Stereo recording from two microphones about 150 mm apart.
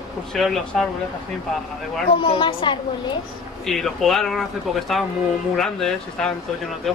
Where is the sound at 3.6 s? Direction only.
Centre (ahead or behind).